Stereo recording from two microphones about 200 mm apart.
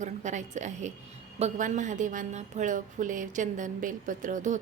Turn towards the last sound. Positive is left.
turn(degrees=-40)  # may be behind; listen again after turning